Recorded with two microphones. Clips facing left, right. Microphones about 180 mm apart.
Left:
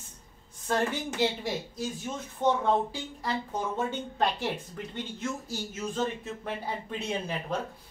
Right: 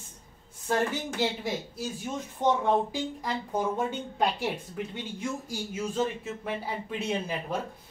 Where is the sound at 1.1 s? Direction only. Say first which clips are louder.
Left 1 dB; 5° right (ahead or behind).